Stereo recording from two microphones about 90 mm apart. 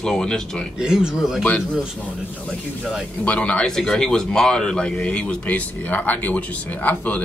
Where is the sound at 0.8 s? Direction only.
10° right (ahead or behind).